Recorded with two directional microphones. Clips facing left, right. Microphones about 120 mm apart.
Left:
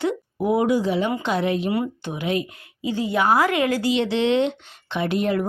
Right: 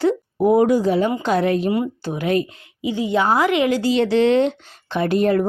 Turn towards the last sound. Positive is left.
turn(degrees=-40)  # may be behind; listen again after turning